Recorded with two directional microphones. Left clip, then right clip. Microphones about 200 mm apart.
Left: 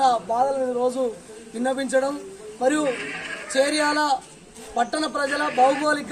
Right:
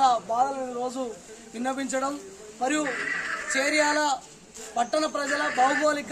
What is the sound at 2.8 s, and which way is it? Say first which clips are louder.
Speech: left 2 dB; 40° right (ahead or behind).